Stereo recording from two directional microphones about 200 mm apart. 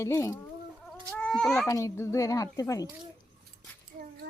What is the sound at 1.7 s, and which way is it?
A child's voice, 15° left (ahead or behind).